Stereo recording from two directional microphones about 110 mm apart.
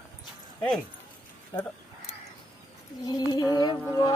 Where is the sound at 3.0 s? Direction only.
35° left (ahead or behind).